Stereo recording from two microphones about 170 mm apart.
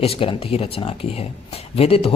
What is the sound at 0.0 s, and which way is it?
Speech, 35° left (ahead or behind).